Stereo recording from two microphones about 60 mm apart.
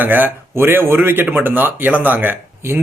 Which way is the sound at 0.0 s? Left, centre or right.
Right.